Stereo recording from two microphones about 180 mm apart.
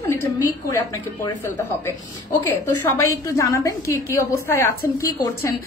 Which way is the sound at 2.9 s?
15° left (ahead or behind).